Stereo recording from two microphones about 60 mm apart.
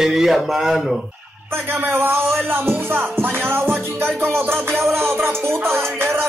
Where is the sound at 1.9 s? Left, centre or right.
Right.